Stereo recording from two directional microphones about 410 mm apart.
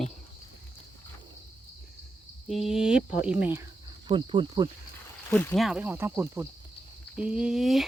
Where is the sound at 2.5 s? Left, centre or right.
Centre.